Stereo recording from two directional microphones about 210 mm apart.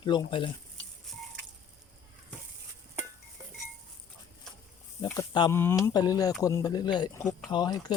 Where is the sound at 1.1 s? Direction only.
Centre (ahead or behind).